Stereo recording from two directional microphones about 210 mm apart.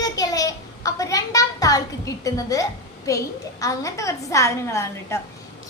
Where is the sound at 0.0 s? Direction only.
15° left (ahead or behind).